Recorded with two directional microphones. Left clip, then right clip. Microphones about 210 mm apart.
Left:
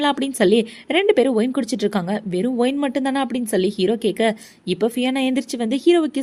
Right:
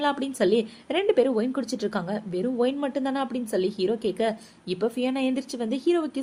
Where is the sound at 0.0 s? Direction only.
35° left (ahead or behind).